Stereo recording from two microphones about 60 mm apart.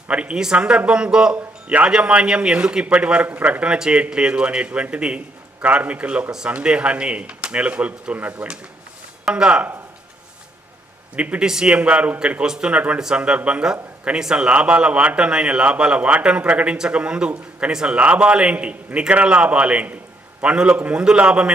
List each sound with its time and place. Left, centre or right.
0.1 s a man's voice: centre
11.2 s a man's voice: centre